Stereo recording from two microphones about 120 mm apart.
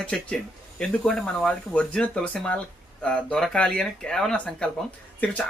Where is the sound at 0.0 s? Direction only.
10° left (ahead or behind).